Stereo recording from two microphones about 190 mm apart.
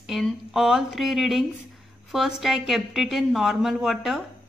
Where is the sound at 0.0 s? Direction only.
Centre (ahead or behind).